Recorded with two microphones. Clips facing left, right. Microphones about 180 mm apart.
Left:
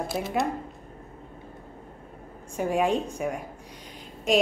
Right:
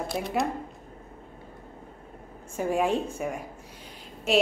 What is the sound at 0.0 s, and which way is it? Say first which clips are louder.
Speech: left 1 dB; centre (ahead or behind).